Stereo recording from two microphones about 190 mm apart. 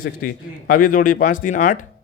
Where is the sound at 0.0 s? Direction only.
50° left (ahead or behind).